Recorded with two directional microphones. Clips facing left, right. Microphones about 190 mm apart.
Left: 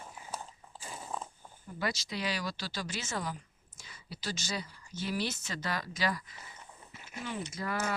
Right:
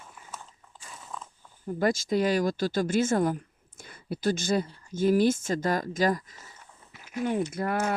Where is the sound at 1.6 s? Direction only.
50° right (ahead or behind).